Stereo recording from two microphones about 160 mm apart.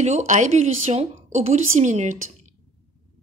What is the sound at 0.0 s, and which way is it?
A woman's voice, 45° right (ahead or behind).